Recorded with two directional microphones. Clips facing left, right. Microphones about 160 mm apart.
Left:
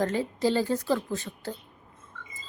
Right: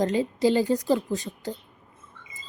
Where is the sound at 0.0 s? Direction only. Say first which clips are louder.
Right 4 dB; 15° right (ahead or behind).